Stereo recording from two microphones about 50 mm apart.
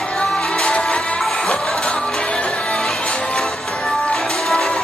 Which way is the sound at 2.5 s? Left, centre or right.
Centre.